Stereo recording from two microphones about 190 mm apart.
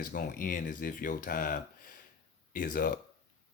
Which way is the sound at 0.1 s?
45° left (ahead or behind).